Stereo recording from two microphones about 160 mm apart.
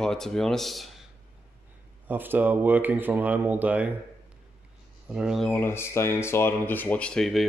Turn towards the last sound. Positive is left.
turn(degrees=0)  # may be behind; listen again after turning